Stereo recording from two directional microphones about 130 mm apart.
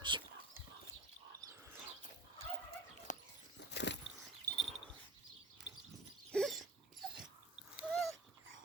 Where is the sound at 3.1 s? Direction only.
70° left (ahead or behind).